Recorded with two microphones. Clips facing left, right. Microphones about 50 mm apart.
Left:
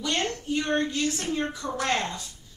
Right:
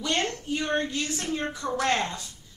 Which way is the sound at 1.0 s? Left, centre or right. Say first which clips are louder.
Left 2 dB; centre.